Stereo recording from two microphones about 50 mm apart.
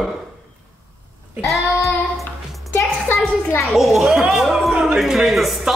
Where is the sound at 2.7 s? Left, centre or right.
Left.